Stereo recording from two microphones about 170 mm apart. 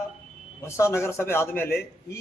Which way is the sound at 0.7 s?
15° left (ahead or behind).